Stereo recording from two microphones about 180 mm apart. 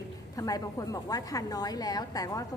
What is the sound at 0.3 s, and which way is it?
A woman's voice, 20° left (ahead or behind).